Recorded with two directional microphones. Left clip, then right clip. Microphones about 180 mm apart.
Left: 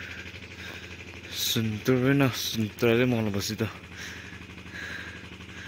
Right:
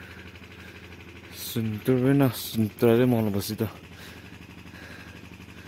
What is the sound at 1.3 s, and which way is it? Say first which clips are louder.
Speech: left 5 dB; 10° right (ahead or behind).